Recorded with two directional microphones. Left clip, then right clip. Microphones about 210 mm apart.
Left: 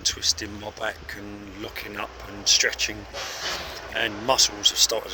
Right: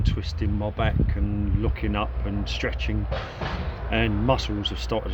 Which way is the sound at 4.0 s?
Centre (ahead or behind).